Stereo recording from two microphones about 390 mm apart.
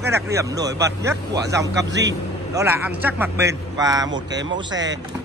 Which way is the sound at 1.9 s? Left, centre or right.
Right.